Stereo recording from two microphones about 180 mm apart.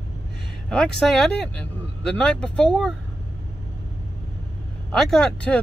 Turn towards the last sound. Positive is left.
turn(degrees=5)  # may be behind; listen again after turning